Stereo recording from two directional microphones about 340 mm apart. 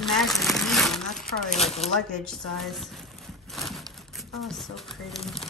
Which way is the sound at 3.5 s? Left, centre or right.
Centre.